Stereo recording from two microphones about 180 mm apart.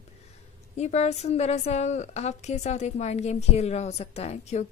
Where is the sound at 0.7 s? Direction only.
40° left (ahead or behind).